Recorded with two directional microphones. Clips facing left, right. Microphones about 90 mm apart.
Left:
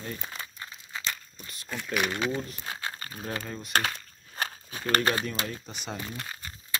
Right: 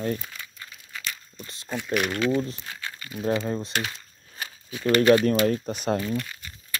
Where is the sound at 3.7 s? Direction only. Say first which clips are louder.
Left 2 dB; 50° left (ahead or behind).